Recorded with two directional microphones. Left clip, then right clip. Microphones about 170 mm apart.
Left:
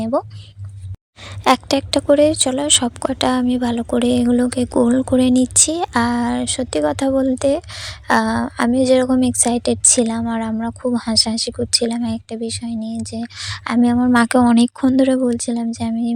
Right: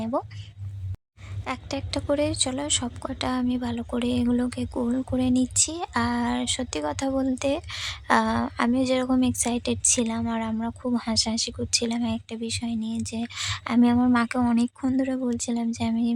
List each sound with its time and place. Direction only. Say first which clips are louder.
0.0 s a sound: left 8 dB; 30° left (ahead or behind)
1.2 s speech: left 18 dB; 55° left (ahead or behind); by 14.2 s 25° left (ahead or behind)
14.2 s speech: left 10 dB; 35° left (ahead or behind); by 16.1 s 20° left (ahead or behind)